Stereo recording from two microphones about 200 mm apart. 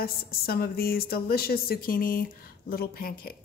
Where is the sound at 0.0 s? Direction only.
50° left (ahead or behind).